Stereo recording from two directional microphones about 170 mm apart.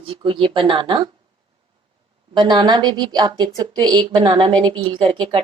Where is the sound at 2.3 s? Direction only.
25° right (ahead or behind).